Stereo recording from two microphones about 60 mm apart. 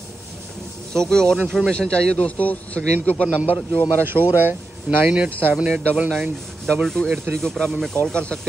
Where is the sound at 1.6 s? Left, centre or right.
Centre.